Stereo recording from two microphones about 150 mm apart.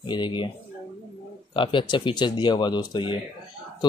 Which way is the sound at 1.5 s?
35° left (ahead or behind).